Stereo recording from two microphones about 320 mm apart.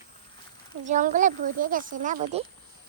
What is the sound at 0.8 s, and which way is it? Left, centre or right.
Speech, right.